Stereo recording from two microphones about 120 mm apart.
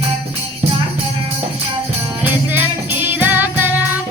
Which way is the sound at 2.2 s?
15° right (ahead or behind).